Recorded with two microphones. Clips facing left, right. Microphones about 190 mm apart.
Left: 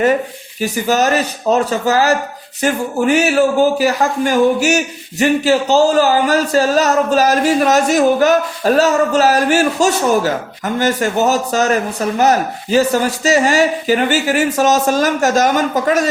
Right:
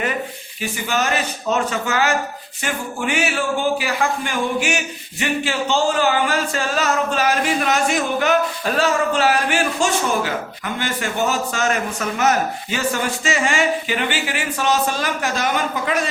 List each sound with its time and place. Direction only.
0.6 s a man's voice: 40° left (ahead or behind)